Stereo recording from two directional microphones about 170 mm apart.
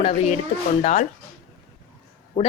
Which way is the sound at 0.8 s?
45° left (ahead or behind).